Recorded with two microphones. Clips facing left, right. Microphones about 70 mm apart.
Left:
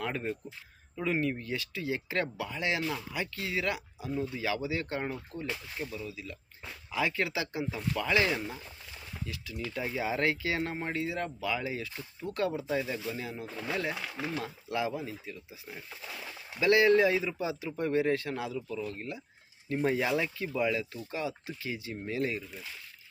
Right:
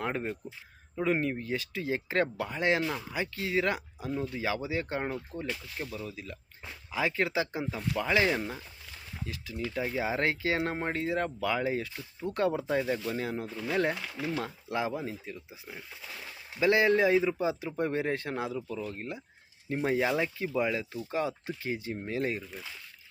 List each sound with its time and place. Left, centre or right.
0.0 s speech: right
1.7 s speech: right
3.1 s speech: right
5.8 s speech: right
6.9 s speech: right
9.6 s speech: centre; by 13.5 s right
14.4 s speech: right
16.6 s speech: right
21.1 s speech: right